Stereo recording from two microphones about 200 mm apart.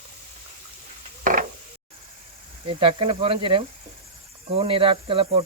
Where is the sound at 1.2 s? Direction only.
40° right (ahead or behind).